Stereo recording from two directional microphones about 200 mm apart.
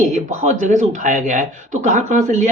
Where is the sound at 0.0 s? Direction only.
35° right (ahead or behind).